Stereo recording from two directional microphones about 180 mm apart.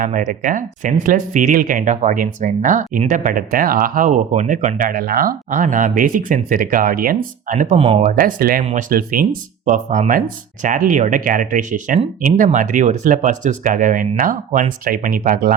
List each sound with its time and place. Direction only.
0.0 s speech: 45° right (ahead or behind)